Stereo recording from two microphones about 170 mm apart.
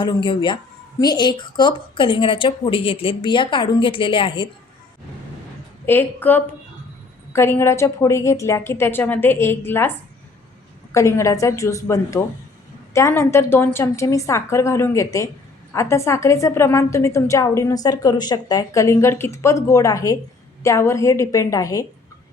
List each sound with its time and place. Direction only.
0.0 s speech: 30° left (ahead or behind)
5.8 s a woman's voice: 10° left (ahead or behind)
10.9 s a woman's voice: 15° left (ahead or behind)